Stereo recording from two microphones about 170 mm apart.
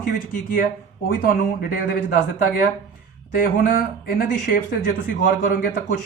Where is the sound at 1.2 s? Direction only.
55° left (ahead or behind).